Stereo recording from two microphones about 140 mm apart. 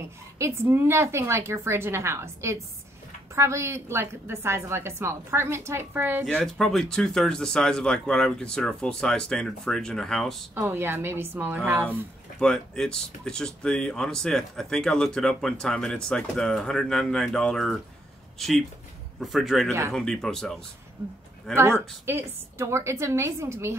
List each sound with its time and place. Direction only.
0.4 s a woman's voice: 15° right (ahead or behind)
6.4 s speech: centre (ahead or behind)
10.5 s a woman's voice: 15° right (ahead or behind)
12.4 s speech: 5° left (ahead or behind)
19.1 s speech: centre (ahead or behind)
21.5 s a woman's voice: 15° right (ahead or behind)